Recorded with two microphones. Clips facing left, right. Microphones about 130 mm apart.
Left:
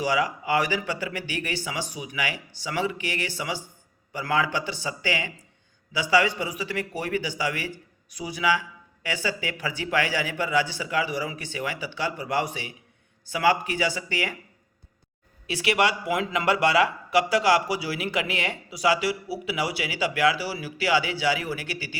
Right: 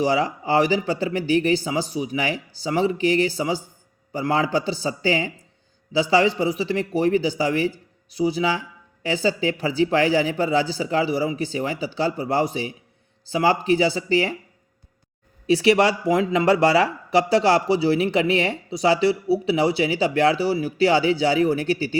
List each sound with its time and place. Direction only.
0.0 s speech: 35° right (ahead or behind)
15.4 s speech: 30° right (ahead or behind)